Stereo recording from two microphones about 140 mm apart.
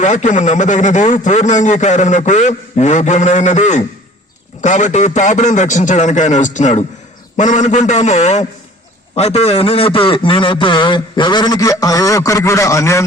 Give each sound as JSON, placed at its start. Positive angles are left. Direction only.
{"t": 0.0, "sound": "a man's voice", "side_deg": 60}